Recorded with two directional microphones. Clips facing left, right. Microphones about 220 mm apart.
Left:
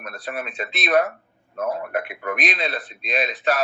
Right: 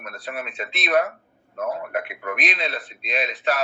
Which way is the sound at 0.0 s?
40° left (ahead or behind).